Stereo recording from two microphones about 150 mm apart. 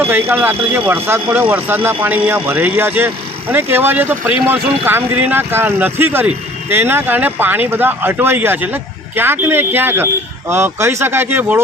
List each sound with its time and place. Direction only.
0.0 s speech: 15° right (ahead or behind)